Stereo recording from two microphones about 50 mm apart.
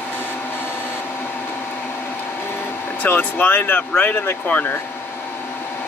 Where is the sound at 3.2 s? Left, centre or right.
Left.